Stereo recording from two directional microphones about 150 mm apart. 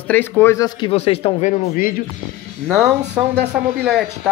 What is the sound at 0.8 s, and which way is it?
Speech, 40° left (ahead or behind).